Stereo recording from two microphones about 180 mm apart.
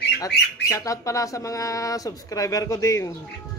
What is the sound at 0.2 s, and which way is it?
Speech, 20° left (ahead or behind).